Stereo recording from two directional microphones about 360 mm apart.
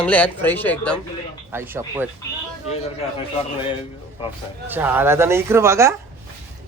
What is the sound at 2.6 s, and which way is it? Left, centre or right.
Speech, centre.